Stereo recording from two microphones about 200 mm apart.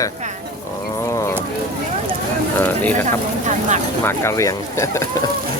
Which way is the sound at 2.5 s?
10° left (ahead or behind).